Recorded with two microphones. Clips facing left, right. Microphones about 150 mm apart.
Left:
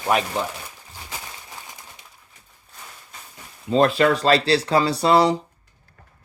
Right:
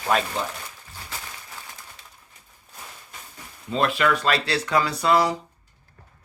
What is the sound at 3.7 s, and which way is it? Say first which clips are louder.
Speech: left 5 dB; 35° left (ahead or behind).